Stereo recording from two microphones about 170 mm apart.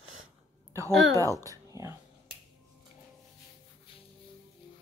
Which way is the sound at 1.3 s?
20° right (ahead or behind).